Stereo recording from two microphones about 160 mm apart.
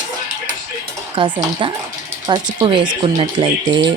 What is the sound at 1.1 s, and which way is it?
Speech, 30° right (ahead or behind).